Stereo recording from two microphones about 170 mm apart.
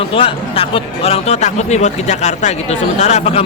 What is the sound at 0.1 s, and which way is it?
Speech, 35° left (ahead or behind).